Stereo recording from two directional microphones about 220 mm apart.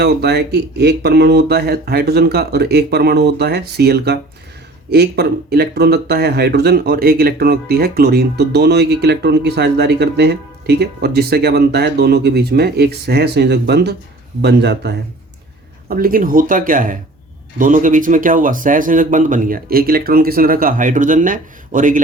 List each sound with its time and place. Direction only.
0.0 s speech: 45° right (ahead or behind)